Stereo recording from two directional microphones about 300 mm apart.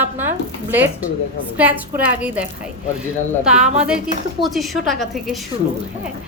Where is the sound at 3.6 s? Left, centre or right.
Right.